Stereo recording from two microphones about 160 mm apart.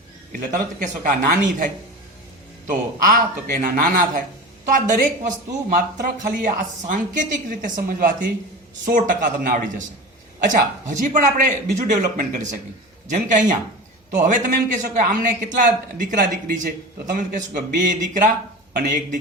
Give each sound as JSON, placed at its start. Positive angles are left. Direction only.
{"t": 0.3, "sound": "a woman's voice", "side_deg": -55}